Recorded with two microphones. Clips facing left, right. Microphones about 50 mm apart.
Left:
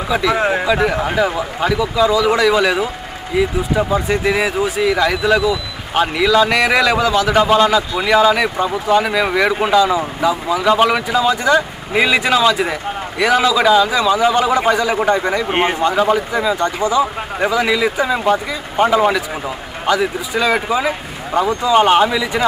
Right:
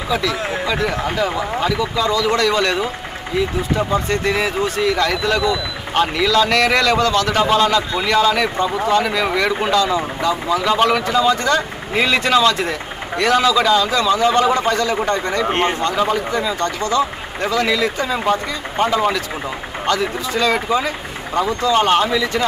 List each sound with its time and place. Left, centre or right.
0.1 s speech: centre
0.8 s speech: centre